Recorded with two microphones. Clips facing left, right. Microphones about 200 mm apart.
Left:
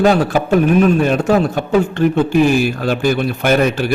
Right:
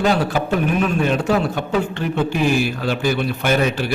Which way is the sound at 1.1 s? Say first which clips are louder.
Left 4 dB; 45° left (ahead or behind).